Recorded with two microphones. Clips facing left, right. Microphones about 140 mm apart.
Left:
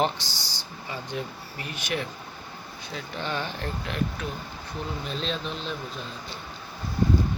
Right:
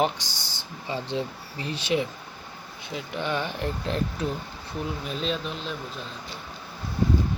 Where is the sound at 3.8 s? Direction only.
30° right (ahead or behind).